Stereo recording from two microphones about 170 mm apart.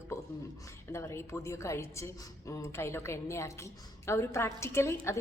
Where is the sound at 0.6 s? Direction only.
15° left (ahead or behind).